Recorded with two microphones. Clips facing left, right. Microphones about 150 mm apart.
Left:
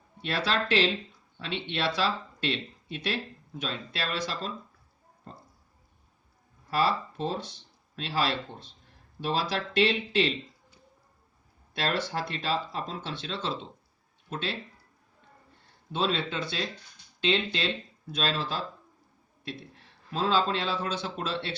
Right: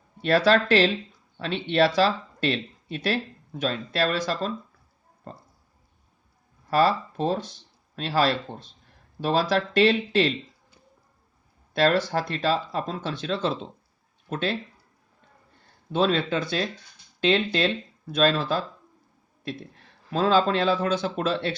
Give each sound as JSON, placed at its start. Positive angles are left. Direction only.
{"t": 0.2, "sound": "speech", "side_deg": -40}
{"t": 6.7, "sound": "speech", "side_deg": -45}
{"t": 11.7, "sound": "speech", "side_deg": -40}
{"t": 15.9, "sound": "speech", "side_deg": -50}
{"t": 20.1, "sound": "speech", "side_deg": -50}